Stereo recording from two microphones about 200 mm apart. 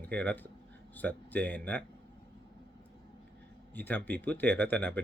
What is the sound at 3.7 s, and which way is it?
Speech, 10° left (ahead or behind).